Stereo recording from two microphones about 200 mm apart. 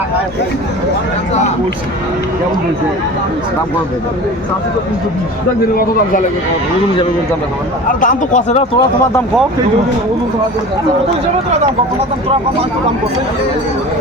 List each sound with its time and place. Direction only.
8.0 s speech: 40° left (ahead or behind)